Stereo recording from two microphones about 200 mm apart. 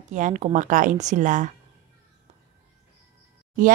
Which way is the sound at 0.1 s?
35° right (ahead or behind).